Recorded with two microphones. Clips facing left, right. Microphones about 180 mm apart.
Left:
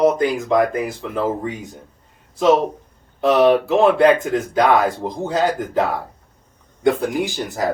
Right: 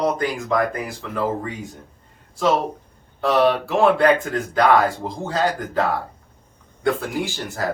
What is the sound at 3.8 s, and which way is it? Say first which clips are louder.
Speech: even; 20° left (ahead or behind).